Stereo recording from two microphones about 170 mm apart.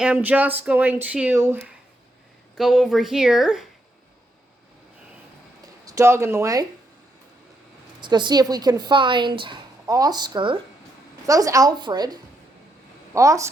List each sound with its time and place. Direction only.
0.0 s speech: 5° right (ahead or behind)
2.6 s speech: 5° right (ahead or behind)
5.8 s speech: 20° right (ahead or behind)
8.0 s speech: 25° right (ahead or behind)